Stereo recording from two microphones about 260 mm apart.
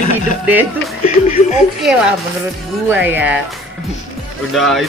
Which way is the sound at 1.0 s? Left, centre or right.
Left.